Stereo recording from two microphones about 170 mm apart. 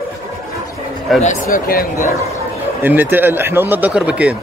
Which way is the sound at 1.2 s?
50° left (ahead or behind).